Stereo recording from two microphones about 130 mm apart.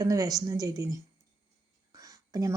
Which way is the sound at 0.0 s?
25° right (ahead or behind).